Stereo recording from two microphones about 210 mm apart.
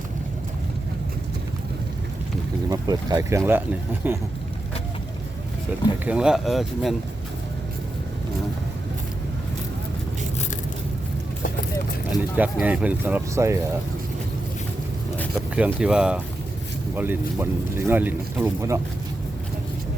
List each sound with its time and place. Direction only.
2.6 s speech: 20° right (ahead or behind)
6.1 s speech: 5° right (ahead or behind)
12.4 s speech: 5° right (ahead or behind)
15.5 s speech: 5° right (ahead or behind)